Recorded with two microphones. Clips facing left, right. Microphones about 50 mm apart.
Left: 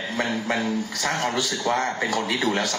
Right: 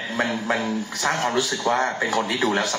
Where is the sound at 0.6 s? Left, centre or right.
Right.